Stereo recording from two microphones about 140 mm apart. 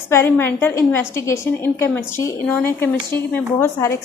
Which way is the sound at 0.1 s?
15° left (ahead or behind).